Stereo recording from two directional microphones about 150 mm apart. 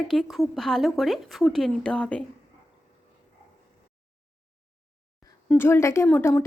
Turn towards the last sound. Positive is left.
turn(degrees=20)  # may be behind; listen again after turning